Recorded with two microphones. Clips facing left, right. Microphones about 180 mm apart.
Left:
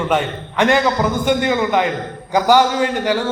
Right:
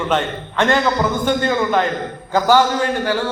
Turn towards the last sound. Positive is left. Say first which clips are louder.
# left 1 dB
turn(degrees=15)  # may be behind; listen again after turning